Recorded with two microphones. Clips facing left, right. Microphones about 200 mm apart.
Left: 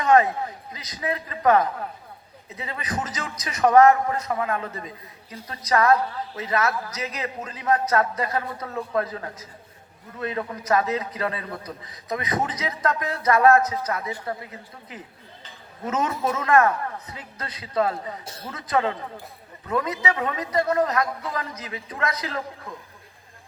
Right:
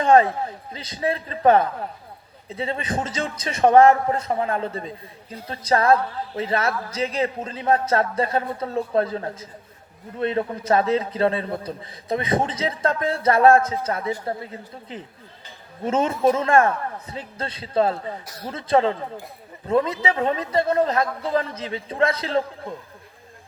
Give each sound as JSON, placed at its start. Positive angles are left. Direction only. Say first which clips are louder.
{"t": 0.0, "sound": "a man's voice", "louder": "right 2 dB", "side_deg": -30}